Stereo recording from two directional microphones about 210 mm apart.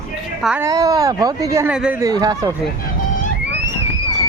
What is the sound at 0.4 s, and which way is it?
Speech, 5° right (ahead or behind).